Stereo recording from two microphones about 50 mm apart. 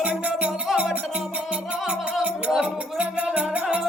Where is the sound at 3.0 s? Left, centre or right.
Right.